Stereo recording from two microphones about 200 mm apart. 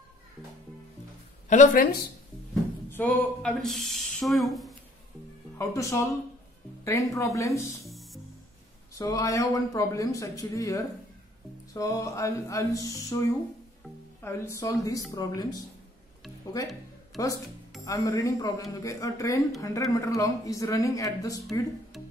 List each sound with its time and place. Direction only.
1.5 s speech: 40° left (ahead or behind)
2.9 s speech: 10° left (ahead or behind)
5.6 s speech: 15° left (ahead or behind)
7.9 s music: centre (ahead or behind)
8.9 s speech: 15° left (ahead or behind)
14.2 s speech: 15° left (ahead or behind)
17.1 s speech: centre (ahead or behind)
17.8 s speech: 15° left (ahead or behind)
21.9 s music: centre (ahead or behind)